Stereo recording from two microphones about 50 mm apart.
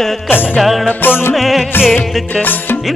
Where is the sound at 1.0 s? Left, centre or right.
Left.